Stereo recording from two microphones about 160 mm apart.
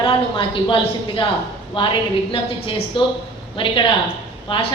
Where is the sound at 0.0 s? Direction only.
30° left (ahead or behind).